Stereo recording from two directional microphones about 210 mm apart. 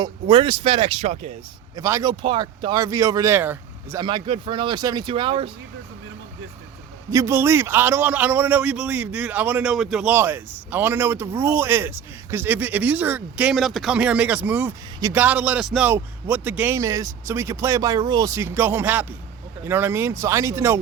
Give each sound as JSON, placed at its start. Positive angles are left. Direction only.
{"t": 0.0, "sound": "speech", "side_deg": -20}
{"t": 1.7, "sound": "a man's voice", "side_deg": -15}
{"t": 4.0, "sound": "speech", "side_deg": -25}
{"t": 7.1, "sound": "a man's voice", "side_deg": -15}